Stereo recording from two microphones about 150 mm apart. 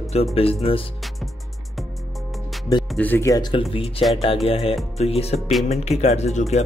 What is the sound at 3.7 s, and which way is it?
Speech, 40° left (ahead or behind).